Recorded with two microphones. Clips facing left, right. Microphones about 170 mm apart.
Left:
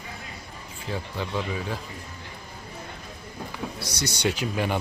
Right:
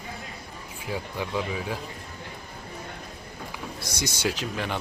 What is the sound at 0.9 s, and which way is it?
Speech, 10° right (ahead or behind).